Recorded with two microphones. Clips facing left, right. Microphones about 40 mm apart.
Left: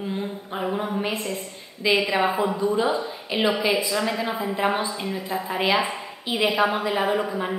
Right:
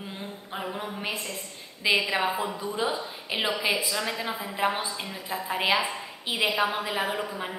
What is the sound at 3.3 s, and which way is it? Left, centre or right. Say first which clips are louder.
Speech: left 5 dB; centre.